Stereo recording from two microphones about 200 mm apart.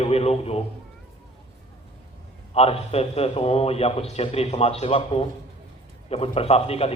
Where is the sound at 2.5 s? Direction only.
30° left (ahead or behind).